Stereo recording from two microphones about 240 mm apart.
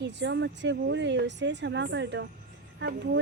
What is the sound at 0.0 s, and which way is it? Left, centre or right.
Speech, right.